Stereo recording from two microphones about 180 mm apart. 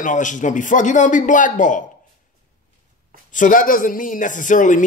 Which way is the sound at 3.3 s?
45° left (ahead or behind).